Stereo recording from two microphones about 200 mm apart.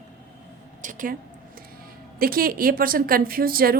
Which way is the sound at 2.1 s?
45° right (ahead or behind).